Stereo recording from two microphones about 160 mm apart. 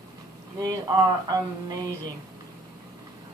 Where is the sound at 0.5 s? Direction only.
20° right (ahead or behind).